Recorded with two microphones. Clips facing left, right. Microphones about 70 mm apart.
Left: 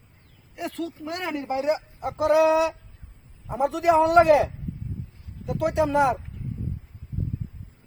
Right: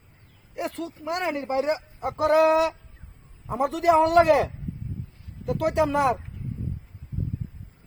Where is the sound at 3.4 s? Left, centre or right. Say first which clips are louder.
Even; right.